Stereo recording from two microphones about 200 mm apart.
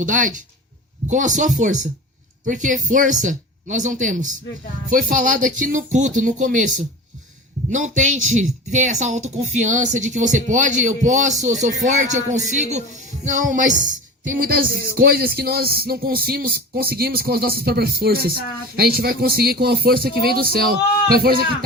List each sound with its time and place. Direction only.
0.0 s speech: 40° right (ahead or behind)